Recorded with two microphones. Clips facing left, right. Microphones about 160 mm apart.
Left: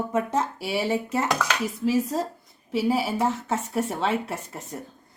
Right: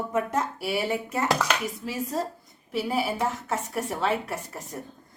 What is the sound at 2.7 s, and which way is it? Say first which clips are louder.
A woman's voice: left 3 dB; 30° left (ahead or behind).